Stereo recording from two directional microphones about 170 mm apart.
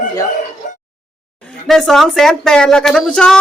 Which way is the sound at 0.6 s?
50° left (ahead or behind).